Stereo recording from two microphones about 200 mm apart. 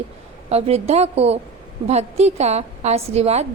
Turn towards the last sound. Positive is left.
turn(degrees=-30)  # may be behind; listen again after turning